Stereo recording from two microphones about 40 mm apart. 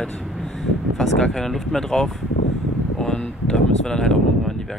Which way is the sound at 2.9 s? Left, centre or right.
Centre.